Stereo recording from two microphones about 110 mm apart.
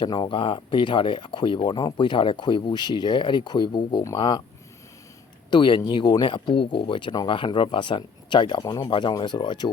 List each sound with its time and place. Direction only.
0.0 s speech: 45° left (ahead or behind)
5.5 s speech: 45° left (ahead or behind)